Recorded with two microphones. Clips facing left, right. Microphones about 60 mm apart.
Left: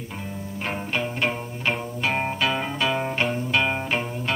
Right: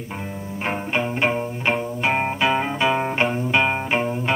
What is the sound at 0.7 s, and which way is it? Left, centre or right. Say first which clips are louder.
Music: right 4 dB; right.